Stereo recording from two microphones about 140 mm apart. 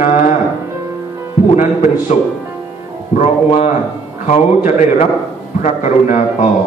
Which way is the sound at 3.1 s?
60° left (ahead or behind).